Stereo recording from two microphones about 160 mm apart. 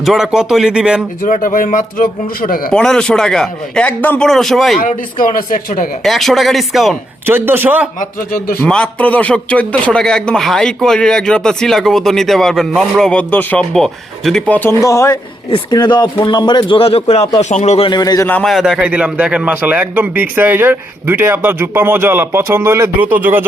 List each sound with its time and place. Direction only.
0.0 s a man's voice: centre (ahead or behind)
1.2 s speech: 60° left (ahead or behind)
2.7 s a man's voice: 5° left (ahead or behind)
4.8 s speech: 60° left (ahead or behind)
6.0 s a man's voice: centre (ahead or behind)
7.3 s a man's voice: 15° right (ahead or behind)
8.6 s a man's voice: 5° left (ahead or behind)
14.8 s speech: 20° left (ahead or behind)
15.4 s speech: 30° left (ahead or behind); by 17.8 s 45° left (ahead or behind)
17.8 s speech: 25° left (ahead or behind)
18.3 s a man's voice: 5° left (ahead or behind); by 23.4 s 10° right (ahead or behind)